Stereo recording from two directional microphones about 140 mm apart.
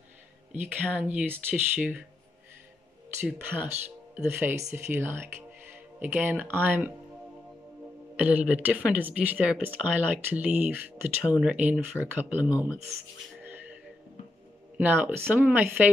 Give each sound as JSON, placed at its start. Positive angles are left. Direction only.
{"t": 0.5, "sound": "a woman's voice", "side_deg": -10}
{"t": 3.3, "sound": "a woman's voice", "side_deg": -10}
{"t": 8.2, "sound": "a woman's voice", "side_deg": -10}
{"t": 13.4, "sound": "music", "side_deg": -15}
{"t": 14.8, "sound": "a woman's voice", "side_deg": -15}